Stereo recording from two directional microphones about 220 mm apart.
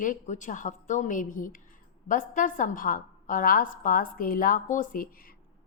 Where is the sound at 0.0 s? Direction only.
35° left (ahead or behind).